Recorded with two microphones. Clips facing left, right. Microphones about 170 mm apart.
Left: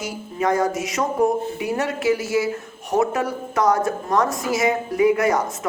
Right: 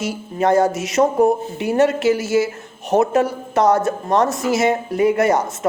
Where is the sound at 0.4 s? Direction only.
30° right (ahead or behind).